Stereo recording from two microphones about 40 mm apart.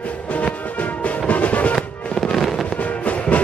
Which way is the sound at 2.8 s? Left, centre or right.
Left.